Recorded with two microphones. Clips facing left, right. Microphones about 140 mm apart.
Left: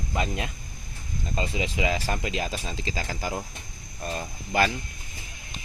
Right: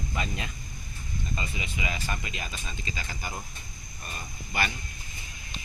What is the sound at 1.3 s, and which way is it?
Speech, 90° left.